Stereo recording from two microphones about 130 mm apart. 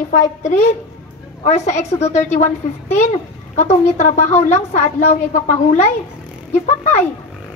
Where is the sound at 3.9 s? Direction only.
60° left (ahead or behind).